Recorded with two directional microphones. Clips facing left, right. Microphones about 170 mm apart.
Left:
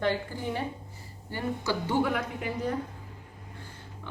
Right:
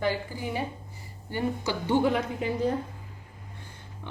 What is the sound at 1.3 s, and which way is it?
A woman's voice, 20° right (ahead or behind).